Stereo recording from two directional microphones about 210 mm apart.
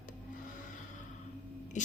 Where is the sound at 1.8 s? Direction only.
35° left (ahead or behind).